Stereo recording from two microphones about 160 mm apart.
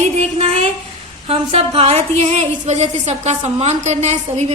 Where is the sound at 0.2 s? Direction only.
40° right (ahead or behind).